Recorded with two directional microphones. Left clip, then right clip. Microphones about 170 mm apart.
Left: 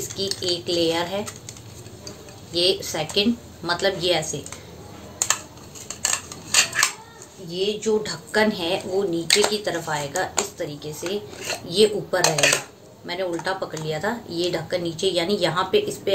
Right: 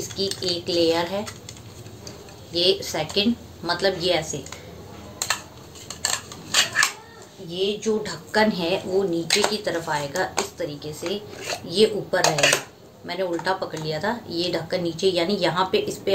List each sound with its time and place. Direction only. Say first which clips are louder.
0.2 s speech: even; centre (ahead or behind)
2.5 s speech: even; 5° left (ahead or behind)
6.0 s a sound: left 1 dB; 5° left (ahead or behind)
7.5 s speech: left 1 dB; 10° left (ahead or behind)